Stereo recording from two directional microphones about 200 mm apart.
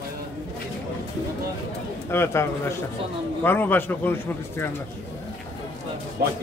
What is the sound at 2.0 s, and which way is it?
Speech, 10° left (ahead or behind).